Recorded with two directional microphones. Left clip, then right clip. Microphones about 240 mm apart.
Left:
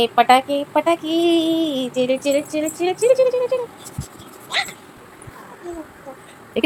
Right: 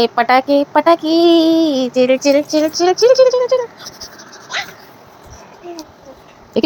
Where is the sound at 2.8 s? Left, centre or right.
Centre.